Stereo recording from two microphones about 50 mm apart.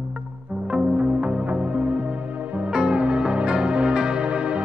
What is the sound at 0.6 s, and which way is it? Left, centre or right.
Music, right.